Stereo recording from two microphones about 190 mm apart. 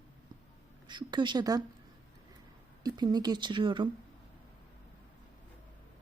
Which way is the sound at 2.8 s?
20° right (ahead or behind).